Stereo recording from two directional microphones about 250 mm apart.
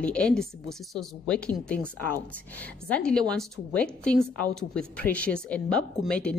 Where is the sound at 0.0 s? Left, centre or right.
Centre.